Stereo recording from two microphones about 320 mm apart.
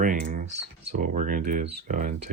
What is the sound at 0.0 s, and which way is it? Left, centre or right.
Computer keyboard, right.